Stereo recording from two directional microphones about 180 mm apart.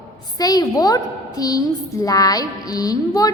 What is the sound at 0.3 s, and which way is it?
Mantra, 20° left (ahead or behind).